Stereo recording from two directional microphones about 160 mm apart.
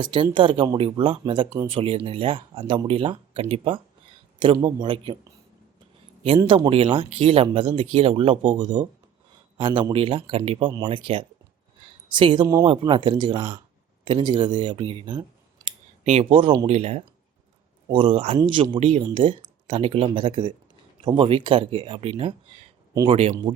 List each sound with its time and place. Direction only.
0.0 s speech: 30° right (ahead or behind)
6.7 s a man's voice: 35° right (ahead or behind)
11.8 s a sound: 30° right (ahead or behind)
12.6 s speech: 30° right (ahead or behind)
16.0 s speech: 35° right (ahead or behind)